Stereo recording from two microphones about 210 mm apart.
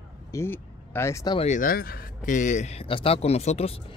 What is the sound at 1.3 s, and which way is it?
A man's voice, 35° left (ahead or behind).